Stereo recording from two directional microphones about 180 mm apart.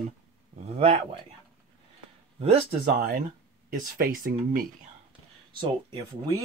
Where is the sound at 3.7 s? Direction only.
50° right (ahead or behind).